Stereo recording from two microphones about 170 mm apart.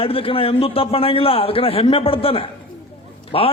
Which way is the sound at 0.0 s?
35° left (ahead or behind).